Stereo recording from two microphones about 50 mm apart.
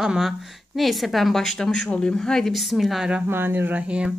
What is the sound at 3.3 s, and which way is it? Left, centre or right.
Speech, right.